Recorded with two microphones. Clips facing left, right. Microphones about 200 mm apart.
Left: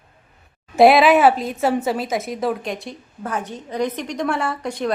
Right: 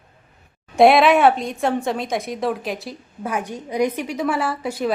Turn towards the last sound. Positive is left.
turn(degrees=-5)  # may be behind; listen again after turning